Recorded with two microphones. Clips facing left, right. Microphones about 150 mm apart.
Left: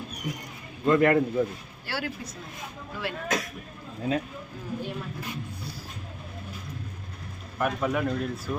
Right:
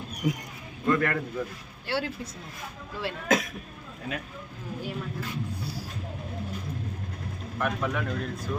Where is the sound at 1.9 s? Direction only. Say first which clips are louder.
Right 4 dB; 25° right (ahead or behind).